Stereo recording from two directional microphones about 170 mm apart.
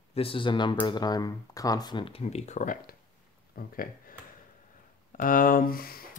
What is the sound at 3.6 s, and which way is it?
Speech, 60° left (ahead or behind).